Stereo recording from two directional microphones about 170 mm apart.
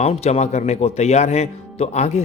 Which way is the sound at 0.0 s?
40° left (ahead or behind).